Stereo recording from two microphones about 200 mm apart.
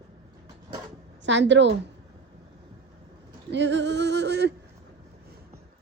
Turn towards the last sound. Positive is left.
turn(degrees=-55)  # may be behind; listen again after turning